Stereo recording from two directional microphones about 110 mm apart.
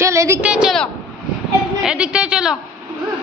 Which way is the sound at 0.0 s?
25° right (ahead or behind).